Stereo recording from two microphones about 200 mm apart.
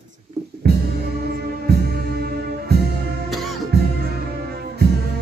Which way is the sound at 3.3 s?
Centre (ahead or behind).